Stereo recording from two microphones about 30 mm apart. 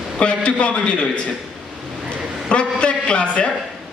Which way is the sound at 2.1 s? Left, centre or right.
Left.